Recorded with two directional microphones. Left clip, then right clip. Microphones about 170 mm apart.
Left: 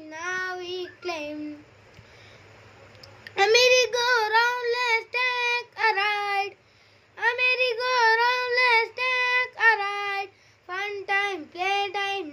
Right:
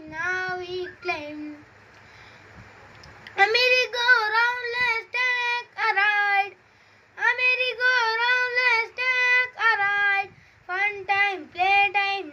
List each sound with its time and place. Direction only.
0.1 s child singing: 25° left (ahead or behind)
3.3 s child singing: 30° left (ahead or behind)